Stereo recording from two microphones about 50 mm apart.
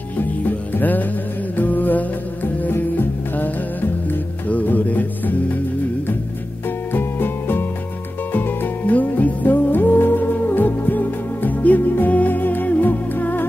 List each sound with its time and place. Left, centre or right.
0.2 s music: left
4.5 s music: left
6.9 s music: left